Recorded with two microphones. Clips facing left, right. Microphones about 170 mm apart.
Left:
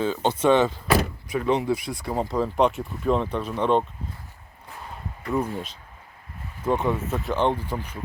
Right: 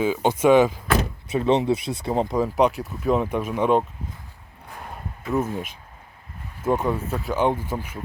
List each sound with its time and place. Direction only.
0.0 s speech: 10° right (ahead or behind)
1.3 s speech: 25° right (ahead or behind)
2.6 s speech: centre (ahead or behind)
5.2 s speech: 5° right (ahead or behind)
6.7 s speech: centre (ahead or behind)